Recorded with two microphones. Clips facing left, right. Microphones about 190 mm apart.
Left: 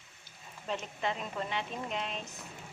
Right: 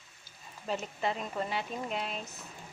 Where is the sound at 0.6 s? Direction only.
5° right (ahead or behind).